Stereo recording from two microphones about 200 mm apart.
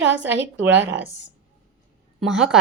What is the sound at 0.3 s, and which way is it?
Speech, 70° right (ahead or behind).